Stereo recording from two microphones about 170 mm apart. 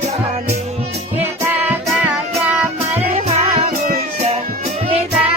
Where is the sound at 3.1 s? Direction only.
40° right (ahead or behind).